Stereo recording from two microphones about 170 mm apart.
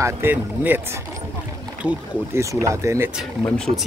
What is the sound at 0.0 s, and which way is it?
Speech, 10° right (ahead or behind).